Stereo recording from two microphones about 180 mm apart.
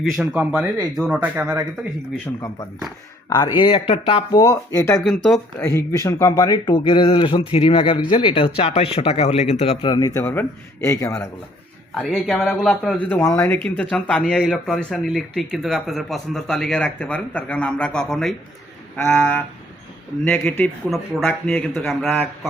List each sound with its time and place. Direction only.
0.2 s speech: 5° right (ahead or behind)
1.5 s speech: 15° right (ahead or behind)
3.2 s speech: 20° left (ahead or behind)
4.9 s speech: centre (ahead or behind)
5.5 s speech: 15° left (ahead or behind); by 9.9 s 35° left (ahead or behind)
9.9 s speech: 15° left (ahead or behind)
11.9 s speech: centre (ahead or behind)